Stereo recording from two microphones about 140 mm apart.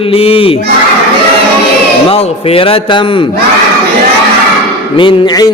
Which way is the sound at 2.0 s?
45° left (ahead or behind).